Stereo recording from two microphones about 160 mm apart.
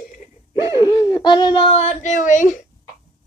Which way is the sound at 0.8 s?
25° left (ahead or behind).